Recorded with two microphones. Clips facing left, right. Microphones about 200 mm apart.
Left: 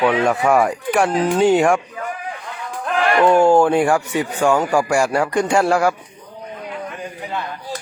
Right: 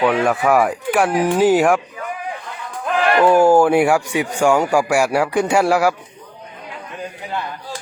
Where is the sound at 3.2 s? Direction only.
5° right (ahead or behind).